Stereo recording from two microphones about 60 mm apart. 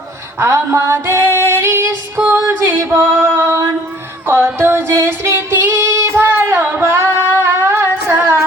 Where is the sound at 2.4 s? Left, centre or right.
Right.